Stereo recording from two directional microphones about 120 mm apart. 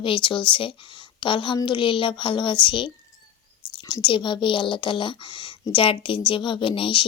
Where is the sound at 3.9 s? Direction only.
45° left (ahead or behind).